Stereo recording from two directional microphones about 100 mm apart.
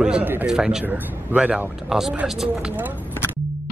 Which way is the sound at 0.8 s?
15° right (ahead or behind).